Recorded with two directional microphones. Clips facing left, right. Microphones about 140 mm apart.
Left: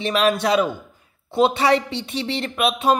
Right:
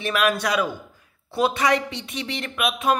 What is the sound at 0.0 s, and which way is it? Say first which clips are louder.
A woman's voice: left 3 dB; 25° left (ahead or behind).